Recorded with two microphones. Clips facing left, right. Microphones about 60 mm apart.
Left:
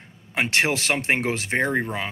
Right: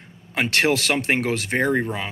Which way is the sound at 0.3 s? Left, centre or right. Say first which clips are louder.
Right 2 dB; left.